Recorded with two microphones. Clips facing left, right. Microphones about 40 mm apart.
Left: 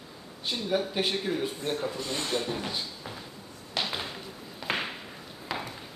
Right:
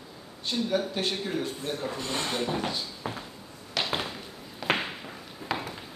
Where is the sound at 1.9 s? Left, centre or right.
Right.